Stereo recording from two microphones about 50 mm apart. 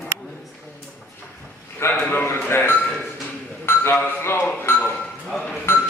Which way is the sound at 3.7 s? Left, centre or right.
Left.